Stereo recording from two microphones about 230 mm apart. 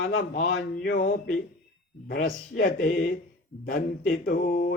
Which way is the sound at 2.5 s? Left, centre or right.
Left.